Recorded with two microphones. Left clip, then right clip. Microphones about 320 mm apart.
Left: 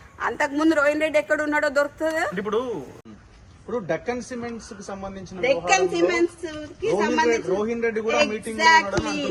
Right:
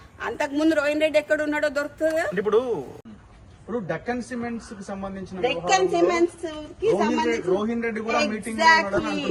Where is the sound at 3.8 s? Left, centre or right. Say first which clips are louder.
Left 3 dB; left.